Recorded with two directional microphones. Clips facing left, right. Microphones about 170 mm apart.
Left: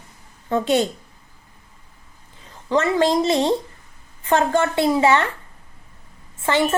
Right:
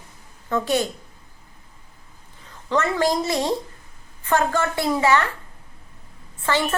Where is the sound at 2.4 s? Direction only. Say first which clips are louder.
Left 3 dB; 20° left (ahead or behind).